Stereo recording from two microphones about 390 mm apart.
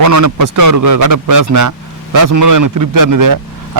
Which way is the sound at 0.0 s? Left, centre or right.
Right.